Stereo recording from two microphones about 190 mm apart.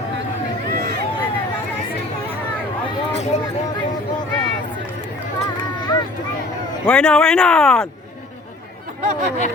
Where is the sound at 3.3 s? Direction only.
35° left (ahead or behind).